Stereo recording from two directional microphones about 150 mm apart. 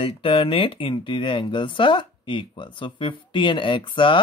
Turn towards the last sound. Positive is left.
turn(degrees=35)  # may be behind; listen again after turning